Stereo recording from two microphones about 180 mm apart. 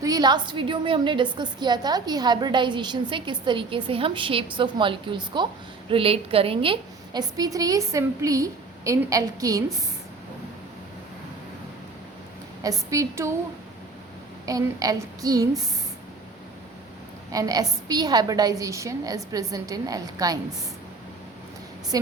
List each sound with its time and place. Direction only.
0.0 s a woman's voice: 20° right (ahead or behind)
12.6 s a woman's voice: 15° right (ahead or behind)
14.4 s a woman's voice: 20° right (ahead or behind)
17.3 s a woman's voice: 20° right (ahead or behind)